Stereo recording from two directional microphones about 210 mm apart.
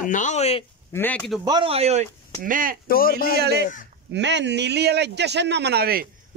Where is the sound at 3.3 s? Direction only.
50° right (ahead or behind).